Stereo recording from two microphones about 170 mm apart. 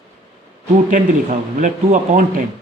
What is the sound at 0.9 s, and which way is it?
A man's voice, 50° right (ahead or behind).